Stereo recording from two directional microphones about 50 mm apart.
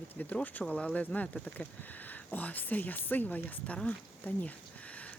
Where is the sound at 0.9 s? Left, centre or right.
Left.